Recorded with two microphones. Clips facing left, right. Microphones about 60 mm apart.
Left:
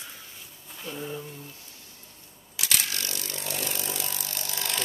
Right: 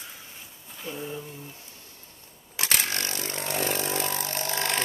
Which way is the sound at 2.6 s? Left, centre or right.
Right.